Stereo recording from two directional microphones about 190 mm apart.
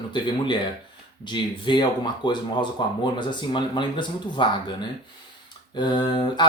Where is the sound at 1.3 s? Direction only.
25° left (ahead or behind).